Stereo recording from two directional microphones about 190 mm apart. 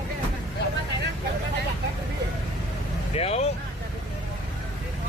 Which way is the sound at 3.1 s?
35° left (ahead or behind).